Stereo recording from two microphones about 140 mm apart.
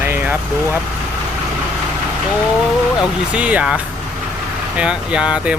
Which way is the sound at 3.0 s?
10° right (ahead or behind).